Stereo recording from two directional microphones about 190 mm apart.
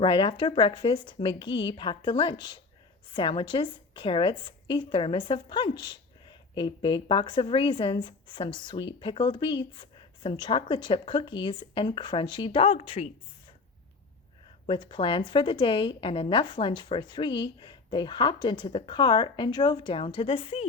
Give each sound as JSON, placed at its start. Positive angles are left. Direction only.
{"t": 0.0, "sound": "a woman's voice", "side_deg": 25}
{"t": 14.7, "sound": "a woman's voice", "side_deg": 25}